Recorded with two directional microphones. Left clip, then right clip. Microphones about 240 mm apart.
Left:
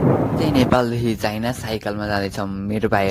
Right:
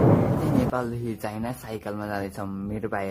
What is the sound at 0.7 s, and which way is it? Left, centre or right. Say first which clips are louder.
Speech: left 10 dB; left.